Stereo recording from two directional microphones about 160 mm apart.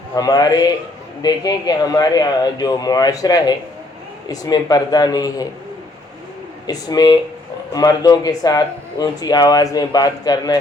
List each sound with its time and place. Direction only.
0.2 s a man's voice: 25° left (ahead or behind)
6.7 s a man's voice: 25° left (ahead or behind)